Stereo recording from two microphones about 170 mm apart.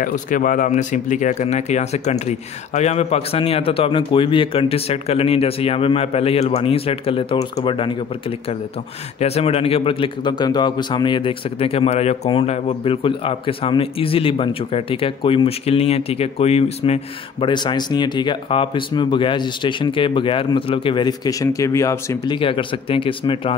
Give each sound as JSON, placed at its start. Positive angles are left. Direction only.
{"t": 0.0, "sound": "a man's voice", "side_deg": 50}
{"t": 9.2, "sound": "a man's voice", "side_deg": 35}